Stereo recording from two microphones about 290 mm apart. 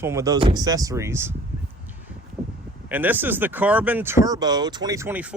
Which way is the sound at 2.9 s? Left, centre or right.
Centre.